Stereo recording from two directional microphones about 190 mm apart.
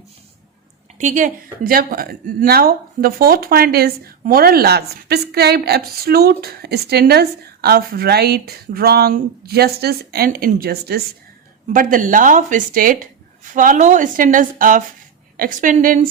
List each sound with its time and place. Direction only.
0.9 s speech: 40° right (ahead or behind)